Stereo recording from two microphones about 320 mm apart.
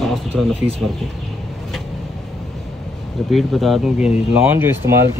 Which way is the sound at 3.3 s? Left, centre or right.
Centre.